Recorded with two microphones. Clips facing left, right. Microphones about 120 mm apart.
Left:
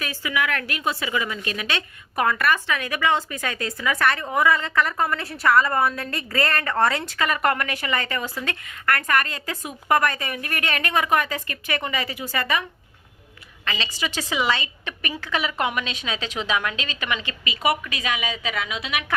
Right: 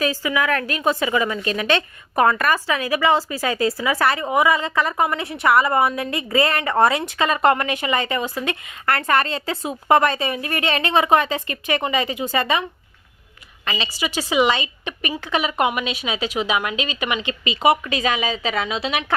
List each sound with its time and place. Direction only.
0.0 s a woman's voice: 40° right (ahead or behind); by 12.6 s 20° right (ahead or behind)
13.7 s a woman's voice: 15° right (ahead or behind)